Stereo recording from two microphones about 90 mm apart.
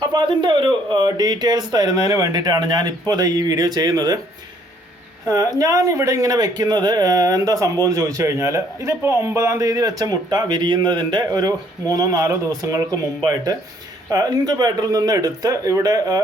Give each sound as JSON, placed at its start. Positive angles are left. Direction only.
{"t": 0.0, "sound": "speech", "side_deg": -55}
{"t": 5.2, "sound": "speech", "side_deg": -40}